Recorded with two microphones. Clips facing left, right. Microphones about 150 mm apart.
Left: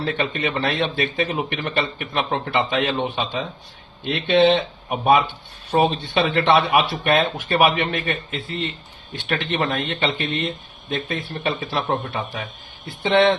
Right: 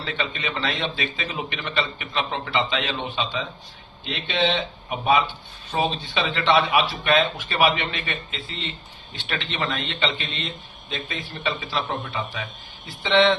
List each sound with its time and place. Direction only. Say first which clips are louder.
0.0 s a man's voice: left 6 dB; 55° left (ahead or behind)